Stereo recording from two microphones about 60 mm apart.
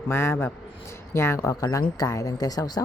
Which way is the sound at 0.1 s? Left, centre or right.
Left.